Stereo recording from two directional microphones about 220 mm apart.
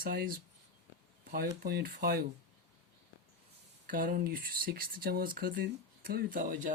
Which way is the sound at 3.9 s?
40° right (ahead or behind).